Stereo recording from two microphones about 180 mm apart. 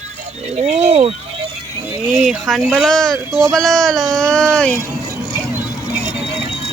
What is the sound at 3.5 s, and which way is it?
Speech, centre (ahead or behind).